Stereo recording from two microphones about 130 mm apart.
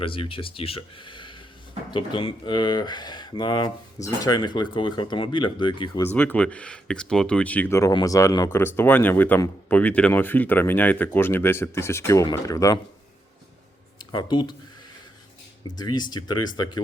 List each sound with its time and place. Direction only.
0.0 s speech: 45° left (ahead or behind)
6.0 s speech: 15° left (ahead or behind)
8.0 s speech: 25° left (ahead or behind)
14.1 s speech: 35° left (ahead or behind)
15.8 s speech: 30° left (ahead or behind)